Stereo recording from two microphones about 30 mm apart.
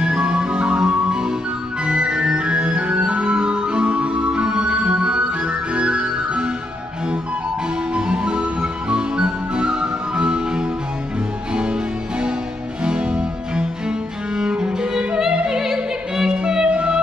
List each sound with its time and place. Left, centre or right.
0.0 s music: right
1.9 s organ: right
7.9 s music: right
15.4 s music: centre
16.3 s music: right